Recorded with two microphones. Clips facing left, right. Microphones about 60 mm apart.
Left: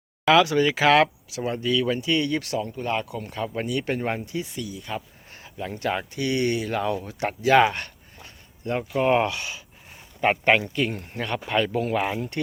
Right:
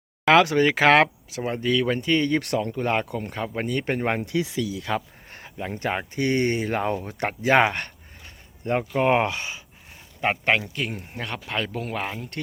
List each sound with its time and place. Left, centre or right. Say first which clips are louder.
0.3 s speech: right 1 dB; right
1.4 s speech: even; right
1.6 s speech: right 1 dB; right
5.3 s speech: right 1 dB; right
10.2 s speech: left 3 dB; centre